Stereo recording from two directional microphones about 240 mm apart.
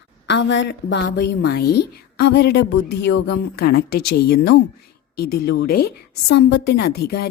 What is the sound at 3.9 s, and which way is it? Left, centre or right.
Speech, left.